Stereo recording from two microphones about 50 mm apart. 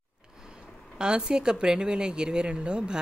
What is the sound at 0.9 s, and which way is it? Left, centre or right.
Speech, centre.